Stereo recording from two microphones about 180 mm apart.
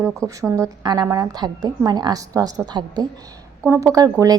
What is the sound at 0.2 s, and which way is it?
A woman's voice, 20° right (ahead or behind).